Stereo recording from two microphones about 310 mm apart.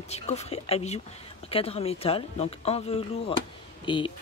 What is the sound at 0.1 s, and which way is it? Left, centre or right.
Speech, centre.